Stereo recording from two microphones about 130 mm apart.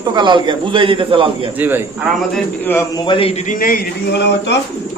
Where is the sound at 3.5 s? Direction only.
90° left.